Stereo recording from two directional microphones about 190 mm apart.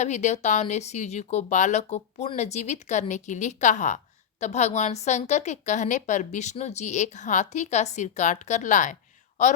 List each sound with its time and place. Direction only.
0.0 s speech: 40° left (ahead or behind)